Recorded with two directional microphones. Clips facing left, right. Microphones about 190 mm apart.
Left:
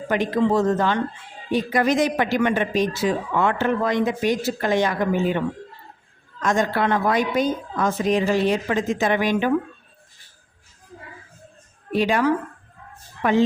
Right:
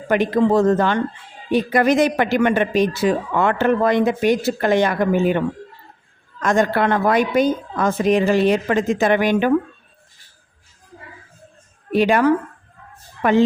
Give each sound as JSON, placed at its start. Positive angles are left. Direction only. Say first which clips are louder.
{"t": 0.1, "sound": "speech", "louder": "right 4 dB", "side_deg": -60}
{"t": 6.4, "sound": "speech", "louder": "right 4 dB", "side_deg": -60}
{"t": 11.9, "sound": "a woman's voice", "louder": "right 4 dB", "side_deg": -60}